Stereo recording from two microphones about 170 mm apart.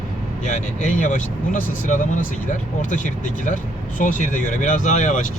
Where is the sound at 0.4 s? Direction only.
45° left (ahead or behind).